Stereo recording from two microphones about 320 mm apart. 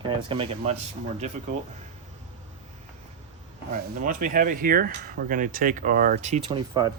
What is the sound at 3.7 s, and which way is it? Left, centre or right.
Speech, right.